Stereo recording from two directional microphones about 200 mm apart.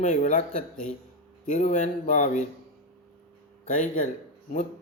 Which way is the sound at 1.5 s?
35° left (ahead or behind).